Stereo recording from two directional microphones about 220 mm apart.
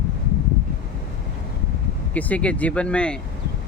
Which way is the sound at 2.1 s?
5° left (ahead or behind).